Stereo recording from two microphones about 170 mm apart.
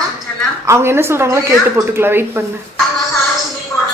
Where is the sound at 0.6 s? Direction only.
15° right (ahead or behind).